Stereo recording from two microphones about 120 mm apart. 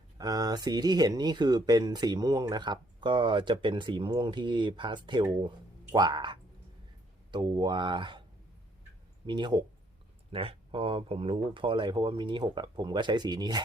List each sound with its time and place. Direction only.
0.2 s speech: 35° right (ahead or behind)
9.2 s speech: 40° right (ahead or behind)
10.3 s speech: 50° right (ahead or behind)